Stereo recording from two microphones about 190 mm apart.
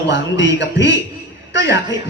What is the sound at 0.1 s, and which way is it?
A man's voice, 70° left (ahead or behind).